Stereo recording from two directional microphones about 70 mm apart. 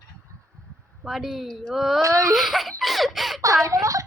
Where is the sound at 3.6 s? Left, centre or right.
Right.